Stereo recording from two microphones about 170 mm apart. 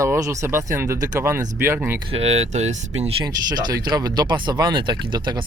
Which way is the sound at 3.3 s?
25° right (ahead or behind).